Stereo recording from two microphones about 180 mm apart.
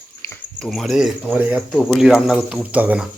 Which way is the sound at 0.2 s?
15° left (ahead or behind).